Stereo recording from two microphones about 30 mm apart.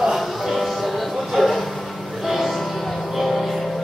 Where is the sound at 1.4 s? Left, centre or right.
Centre.